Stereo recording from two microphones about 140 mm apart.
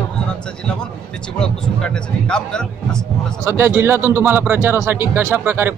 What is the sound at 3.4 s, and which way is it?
A man's voice, 15° right (ahead or behind).